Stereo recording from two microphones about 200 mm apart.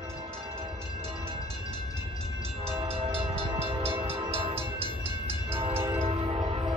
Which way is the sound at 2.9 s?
30° right (ahead or behind).